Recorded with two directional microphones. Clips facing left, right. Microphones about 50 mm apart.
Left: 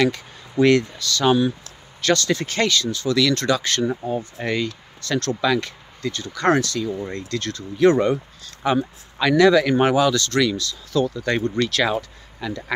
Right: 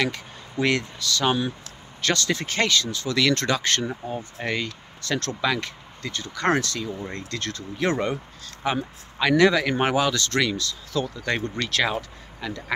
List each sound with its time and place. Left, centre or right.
0.6 s speech: centre
3.2 s speech: right
4.4 s speech: centre
4.6 s speech: right
11.2 s speech: centre